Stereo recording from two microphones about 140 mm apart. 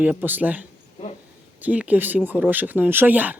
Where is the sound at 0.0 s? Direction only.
10° right (ahead or behind).